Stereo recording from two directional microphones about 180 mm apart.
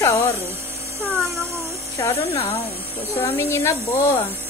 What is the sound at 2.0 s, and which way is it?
Speech, 15° left (ahead or behind).